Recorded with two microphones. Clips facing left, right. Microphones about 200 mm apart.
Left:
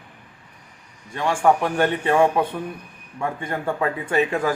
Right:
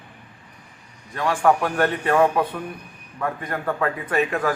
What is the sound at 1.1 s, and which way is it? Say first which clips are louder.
A man's voice: even; 20° left (ahead or behind).